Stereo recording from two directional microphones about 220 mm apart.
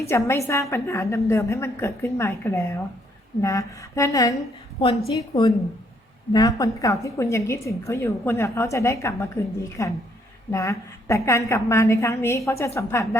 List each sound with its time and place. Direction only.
0.1 s a woman's voice: 10° left (ahead or behind)